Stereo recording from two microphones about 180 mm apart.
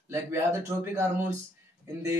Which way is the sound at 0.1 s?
15° right (ahead or behind).